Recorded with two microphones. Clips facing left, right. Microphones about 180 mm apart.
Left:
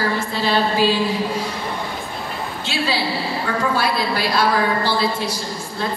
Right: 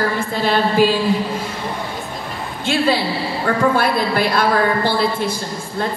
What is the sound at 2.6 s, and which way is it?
A woman's voice, 50° right (ahead or behind).